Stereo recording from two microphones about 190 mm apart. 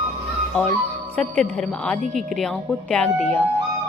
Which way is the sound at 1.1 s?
5° left (ahead or behind).